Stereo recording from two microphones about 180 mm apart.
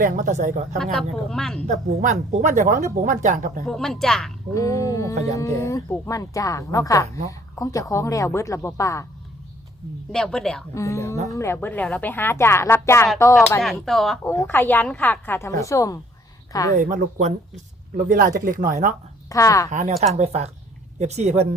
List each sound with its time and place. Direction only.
0.0 s speech: 45° right (ahead or behind)
0.8 s a woman's voice: centre (ahead or behind)
1.6 s speech: 40° right (ahead or behind)
3.7 s a woman's voice: centre (ahead or behind)
4.5 s a woman's voice: 15° left (ahead or behind)
10.1 s a woman's voice: 5° left (ahead or behind)
10.8 s a woman's voice: 15° left (ahead or behind)
13.6 s a woman's voice: centre (ahead or behind)
14.3 s a woman's voice: 15° left (ahead or behind)
16.7 s speech: 45° right (ahead or behind)
19.3 s a woman's voice: 20° left (ahead or behind)
20.1 s speech: 35° right (ahead or behind)